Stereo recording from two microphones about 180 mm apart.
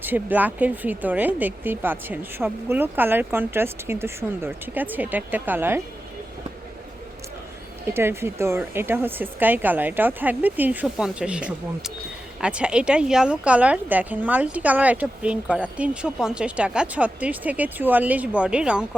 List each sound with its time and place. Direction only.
0.0 s a woman's voice: 10° right (ahead or behind)
7.9 s a woman's voice: 15° right (ahead or behind)